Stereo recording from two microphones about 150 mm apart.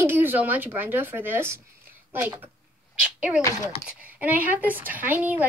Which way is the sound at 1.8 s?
15° right (ahead or behind).